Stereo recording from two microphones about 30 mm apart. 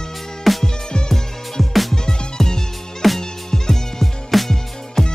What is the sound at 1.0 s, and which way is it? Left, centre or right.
Music, centre.